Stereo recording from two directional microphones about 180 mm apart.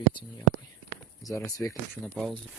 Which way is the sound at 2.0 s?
5° left (ahead or behind).